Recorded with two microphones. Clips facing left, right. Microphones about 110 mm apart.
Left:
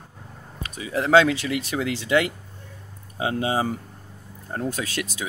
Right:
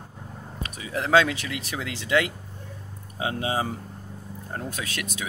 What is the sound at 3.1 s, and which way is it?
Speech, 30° left (ahead or behind).